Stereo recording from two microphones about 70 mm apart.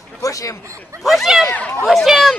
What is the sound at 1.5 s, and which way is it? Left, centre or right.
Speech, left.